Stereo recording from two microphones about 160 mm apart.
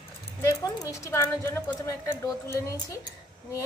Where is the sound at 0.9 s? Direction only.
15° left (ahead or behind).